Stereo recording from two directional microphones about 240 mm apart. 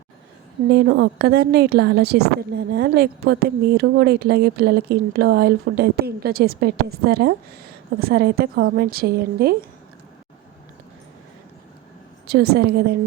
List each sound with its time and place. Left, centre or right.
0.7 s speech: right
12.3 s speech: right